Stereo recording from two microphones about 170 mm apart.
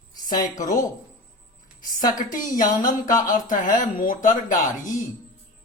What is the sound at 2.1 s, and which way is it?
Speech, 50° left (ahead or behind).